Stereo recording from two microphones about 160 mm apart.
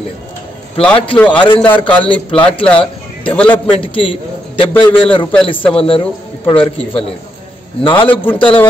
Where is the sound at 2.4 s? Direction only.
35° left (ahead or behind).